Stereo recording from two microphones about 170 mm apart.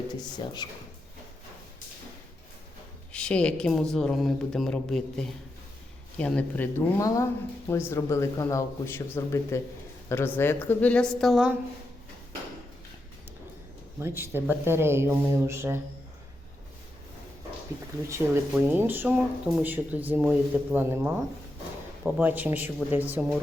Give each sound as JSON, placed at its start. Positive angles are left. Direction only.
{"t": 0.4, "sound": "speech", "side_deg": 25}
{"t": 3.1, "sound": "a man's voice", "side_deg": 5}
{"t": 14.0, "sound": "speech", "side_deg": -15}
{"t": 18.1, "sound": "speech", "side_deg": -10}